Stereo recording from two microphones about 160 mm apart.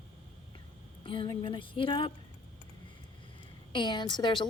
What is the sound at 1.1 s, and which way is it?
A woman's voice, 30° left (ahead or behind).